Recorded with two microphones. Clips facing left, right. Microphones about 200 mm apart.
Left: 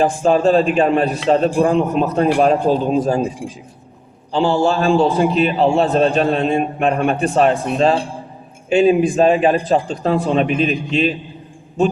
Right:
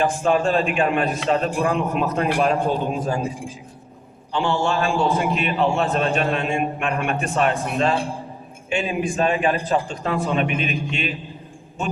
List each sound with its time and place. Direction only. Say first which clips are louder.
0.0 s a man's voice: left 5 dB; 35° left (ahead or behind)
4.3 s a man's voice: left 6 dB; 35° left (ahead or behind)